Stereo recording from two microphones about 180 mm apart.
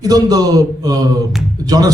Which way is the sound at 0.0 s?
20° right (ahead or behind).